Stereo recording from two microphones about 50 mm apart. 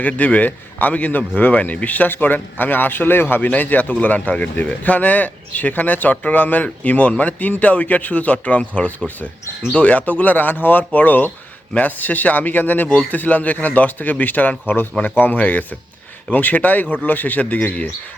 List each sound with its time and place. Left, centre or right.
0.0 s speech: left
3.5 s speech: left